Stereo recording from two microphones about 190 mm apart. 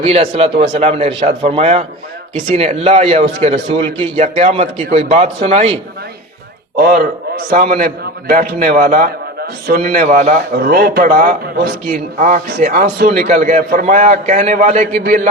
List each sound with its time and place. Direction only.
0.0 s a man's voice: 35° right (ahead or behind)
6.7 s a man's voice: 55° right (ahead or behind)